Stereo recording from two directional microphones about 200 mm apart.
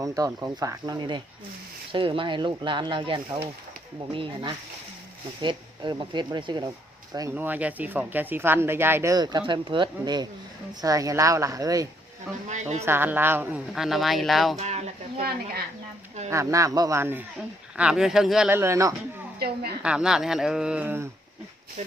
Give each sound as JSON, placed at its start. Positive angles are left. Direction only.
{"t": 0.0, "sound": "speech", "side_deg": -15}
{"t": 12.5, "sound": "speech", "side_deg": -35}
{"t": 12.8, "sound": "speech", "side_deg": -10}
{"t": 14.5, "sound": "speech", "side_deg": -35}
{"t": 16.3, "sound": "speech", "side_deg": -15}
{"t": 21.8, "sound": "speech", "side_deg": -35}